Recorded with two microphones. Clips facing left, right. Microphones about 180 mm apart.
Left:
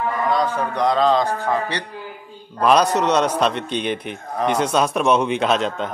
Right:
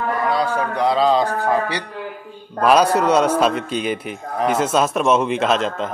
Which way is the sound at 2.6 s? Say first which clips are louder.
Right 2 dB; 5° right (ahead or behind).